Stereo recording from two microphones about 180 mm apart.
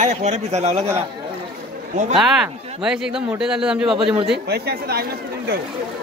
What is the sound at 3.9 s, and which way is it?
Speech, 20° right (ahead or behind).